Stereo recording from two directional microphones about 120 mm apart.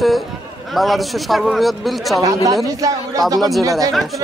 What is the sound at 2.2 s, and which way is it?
A man's voice, 25° right (ahead or behind).